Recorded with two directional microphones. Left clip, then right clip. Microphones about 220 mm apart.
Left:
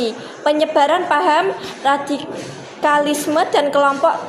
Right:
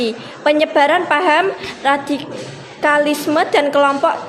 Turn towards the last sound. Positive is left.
turn(degrees=-20)  # may be behind; listen again after turning